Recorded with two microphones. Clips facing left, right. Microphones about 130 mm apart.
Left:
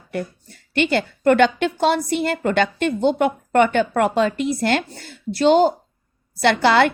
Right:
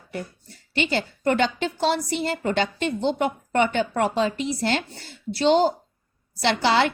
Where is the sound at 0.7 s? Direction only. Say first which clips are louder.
Left 5 dB; 60° left (ahead or behind).